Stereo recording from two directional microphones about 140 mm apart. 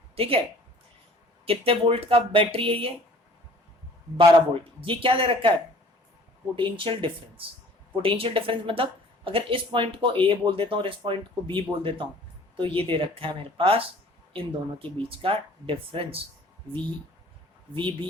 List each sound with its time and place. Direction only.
0.2 s speech: 40° right (ahead or behind)
1.5 s speech: 40° right (ahead or behind)
4.2 s speech: 40° right (ahead or behind)
6.6 s speech: 35° right (ahead or behind)
17.7 s speech: 35° right (ahead or behind)